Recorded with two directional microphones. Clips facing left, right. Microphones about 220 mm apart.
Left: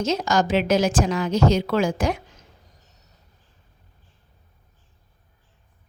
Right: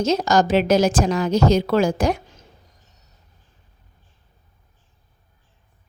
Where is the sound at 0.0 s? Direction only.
40° right (ahead or behind).